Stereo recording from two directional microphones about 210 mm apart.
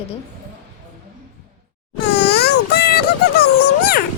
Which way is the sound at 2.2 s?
50° left (ahead or behind).